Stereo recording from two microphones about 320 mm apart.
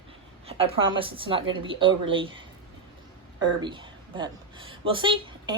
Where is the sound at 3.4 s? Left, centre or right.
Centre.